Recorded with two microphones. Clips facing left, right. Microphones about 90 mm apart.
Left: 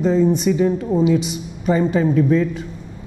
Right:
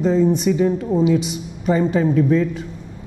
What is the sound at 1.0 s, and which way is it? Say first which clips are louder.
A woman's voice: even; 15° left (ahead or behind).